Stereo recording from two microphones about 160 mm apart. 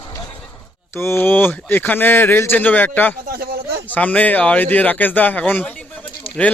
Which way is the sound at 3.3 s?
70° right (ahead or behind).